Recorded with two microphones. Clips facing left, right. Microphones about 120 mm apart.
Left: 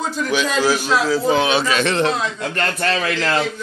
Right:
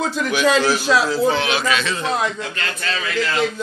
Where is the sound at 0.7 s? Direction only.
90° right.